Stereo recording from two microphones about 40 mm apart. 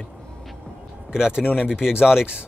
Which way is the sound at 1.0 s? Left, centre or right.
Centre.